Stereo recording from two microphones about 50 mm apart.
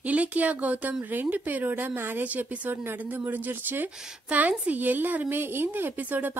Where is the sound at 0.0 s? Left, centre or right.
Right.